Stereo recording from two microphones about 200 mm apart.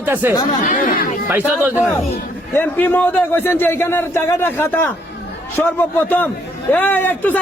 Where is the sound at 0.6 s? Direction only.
40° left (ahead or behind).